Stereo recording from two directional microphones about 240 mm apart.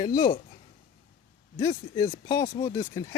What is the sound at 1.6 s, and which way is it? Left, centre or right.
Speech, centre.